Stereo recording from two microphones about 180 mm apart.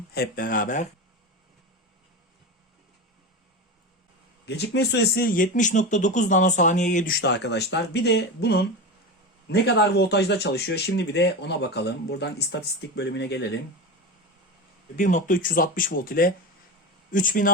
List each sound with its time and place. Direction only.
0.1 s speech: 55° left (ahead or behind)
4.4 s speech: 70° left (ahead or behind)
14.9 s speech: 45° left (ahead or behind)